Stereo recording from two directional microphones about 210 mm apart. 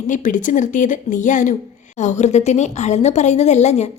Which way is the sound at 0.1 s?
40° left (ahead or behind).